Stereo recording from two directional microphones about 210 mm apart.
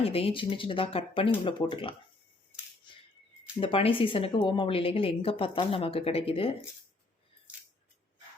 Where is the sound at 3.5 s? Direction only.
25° left (ahead or behind).